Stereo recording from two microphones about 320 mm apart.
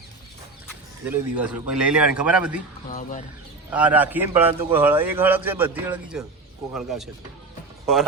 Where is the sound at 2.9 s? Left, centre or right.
Left.